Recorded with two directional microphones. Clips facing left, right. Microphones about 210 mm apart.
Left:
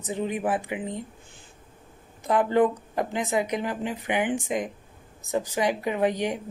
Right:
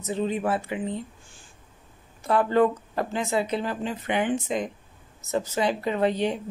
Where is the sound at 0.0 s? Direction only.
15° left (ahead or behind).